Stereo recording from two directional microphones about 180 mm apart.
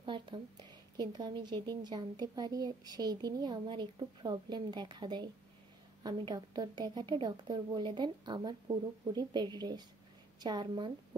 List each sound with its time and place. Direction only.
0.0 s a woman's voice: 25° right (ahead or behind)